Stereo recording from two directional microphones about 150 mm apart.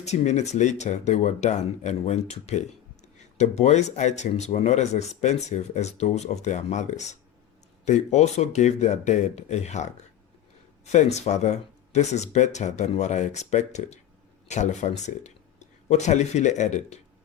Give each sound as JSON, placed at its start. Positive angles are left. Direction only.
{"t": 0.0, "sound": "speech", "side_deg": 50}
{"t": 10.9, "sound": "speech", "side_deg": 50}